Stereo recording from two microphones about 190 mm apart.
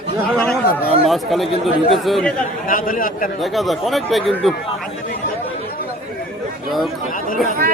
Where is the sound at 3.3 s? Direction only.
Centre (ahead or behind).